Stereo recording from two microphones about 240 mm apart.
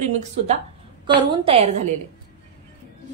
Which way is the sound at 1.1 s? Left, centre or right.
Centre.